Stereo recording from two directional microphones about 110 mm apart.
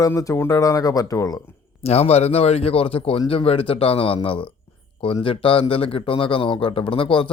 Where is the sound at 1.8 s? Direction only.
75° left (ahead or behind).